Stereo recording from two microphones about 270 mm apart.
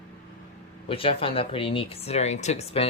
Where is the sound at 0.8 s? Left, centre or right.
Centre.